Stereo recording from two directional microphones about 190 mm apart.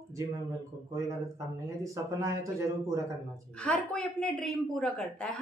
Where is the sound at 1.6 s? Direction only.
15° right (ahead or behind).